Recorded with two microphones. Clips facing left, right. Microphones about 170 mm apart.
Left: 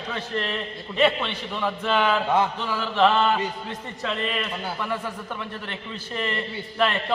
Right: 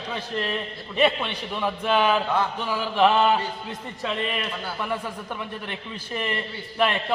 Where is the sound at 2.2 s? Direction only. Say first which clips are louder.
Left 3 dB; 20° left (ahead or behind).